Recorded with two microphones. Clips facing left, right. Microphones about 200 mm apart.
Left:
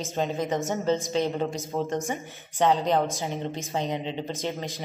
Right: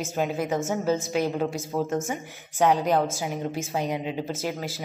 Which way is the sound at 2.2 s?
15° right (ahead or behind).